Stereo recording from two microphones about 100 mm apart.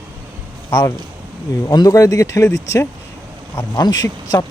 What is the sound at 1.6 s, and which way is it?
Speech, 40° left (ahead or behind).